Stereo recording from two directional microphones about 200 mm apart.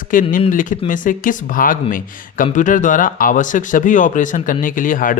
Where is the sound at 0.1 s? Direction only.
45° left (ahead or behind).